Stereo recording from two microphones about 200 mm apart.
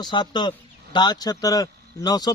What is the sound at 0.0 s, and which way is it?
A man's voice, 20° left (ahead or behind).